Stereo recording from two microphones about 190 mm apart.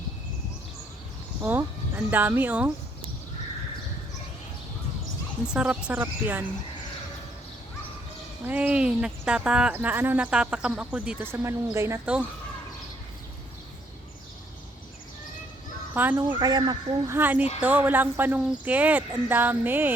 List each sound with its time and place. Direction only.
1.4 s speech: 10° right (ahead or behind)
5.5 s speech: 5° right (ahead or behind)
8.4 s speech: 10° right (ahead or behind)
16.0 s speech: 10° right (ahead or behind)
16.4 s speech: 20° right (ahead or behind)